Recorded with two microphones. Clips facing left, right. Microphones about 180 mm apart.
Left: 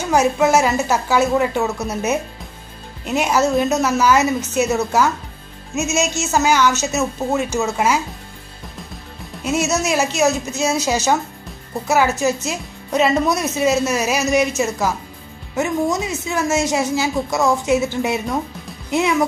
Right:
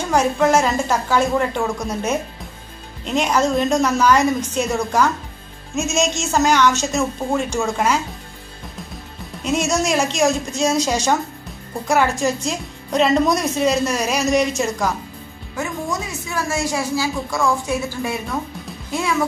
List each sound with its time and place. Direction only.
0.1 s a woman's voice: 5° left (ahead or behind)
9.4 s a woman's voice: 5° left (ahead or behind)
15.5 s a woman's voice: 20° left (ahead or behind)